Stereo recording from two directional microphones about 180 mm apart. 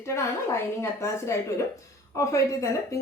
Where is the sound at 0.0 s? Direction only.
15° left (ahead or behind).